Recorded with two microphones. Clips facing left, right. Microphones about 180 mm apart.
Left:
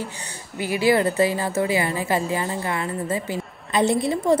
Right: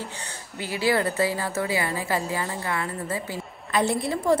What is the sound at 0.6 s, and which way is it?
A woman's voice, 15° left (ahead or behind).